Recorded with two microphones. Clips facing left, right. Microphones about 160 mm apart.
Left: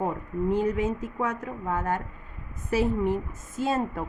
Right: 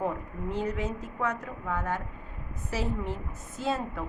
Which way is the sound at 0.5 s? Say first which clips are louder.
Left 5 dB; 55° left (ahead or behind).